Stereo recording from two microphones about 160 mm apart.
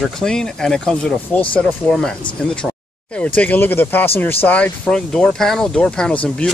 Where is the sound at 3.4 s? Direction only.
10° left (ahead or behind).